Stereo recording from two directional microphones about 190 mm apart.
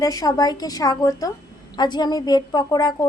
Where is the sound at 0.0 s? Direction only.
20° left (ahead or behind).